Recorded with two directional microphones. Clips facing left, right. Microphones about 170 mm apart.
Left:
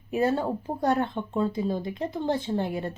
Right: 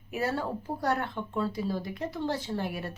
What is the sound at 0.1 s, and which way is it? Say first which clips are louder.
Speech: left 6 dB; 20° left (ahead or behind).